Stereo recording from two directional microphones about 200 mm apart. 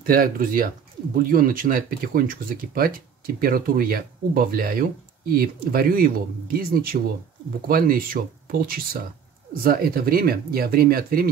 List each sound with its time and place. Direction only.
0.0 s speech: 45° right (ahead or behind)